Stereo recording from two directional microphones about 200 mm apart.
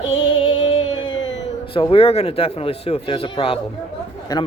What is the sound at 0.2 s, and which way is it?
Music, 25° left (ahead or behind).